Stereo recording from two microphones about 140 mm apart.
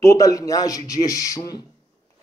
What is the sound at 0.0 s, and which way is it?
A man's voice, 25° left (ahead or behind).